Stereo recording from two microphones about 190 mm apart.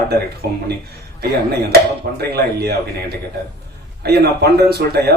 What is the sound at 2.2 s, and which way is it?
Speech, 55° right (ahead or behind).